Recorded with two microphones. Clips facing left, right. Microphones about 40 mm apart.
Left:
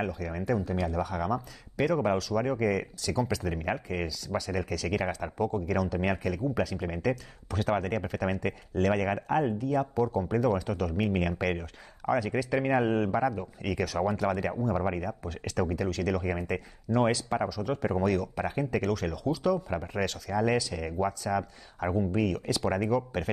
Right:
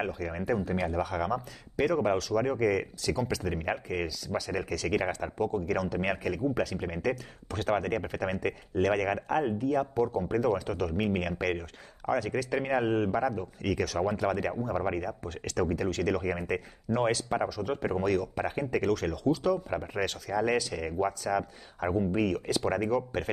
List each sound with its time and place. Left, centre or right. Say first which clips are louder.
0.0 s speech: even; centre
1.8 s speech: even; centre
15.6 s speech: right 1 dB; centre